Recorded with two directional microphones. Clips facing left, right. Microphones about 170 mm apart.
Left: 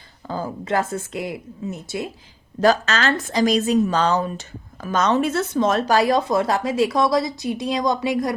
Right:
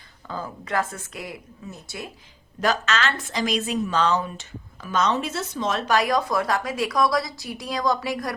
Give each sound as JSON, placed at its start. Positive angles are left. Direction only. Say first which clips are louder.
{"t": 0.3, "sound": "a woman's voice", "louder": "left 6 dB", "side_deg": 35}
{"t": 2.6, "sound": "a woman's voice", "louder": "left 5 dB", "side_deg": 35}
{"t": 5.8, "sound": "a woman's voice", "louder": "left 4 dB", "side_deg": 35}